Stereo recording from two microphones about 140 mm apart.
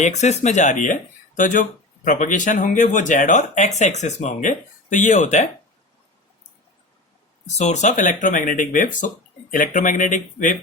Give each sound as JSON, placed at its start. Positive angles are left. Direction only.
{"t": 0.0, "sound": "speech", "side_deg": 55}
{"t": 7.4, "sound": "speech", "side_deg": 55}